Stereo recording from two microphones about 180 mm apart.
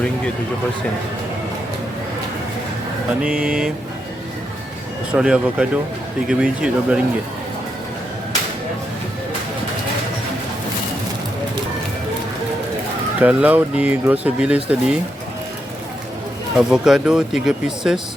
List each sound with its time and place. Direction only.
3.2 s speech: 5° right (ahead or behind)
5.1 s speech: 5° right (ahead or behind)
13.1 s speech: 10° right (ahead or behind)
16.6 s speech: 5° right (ahead or behind)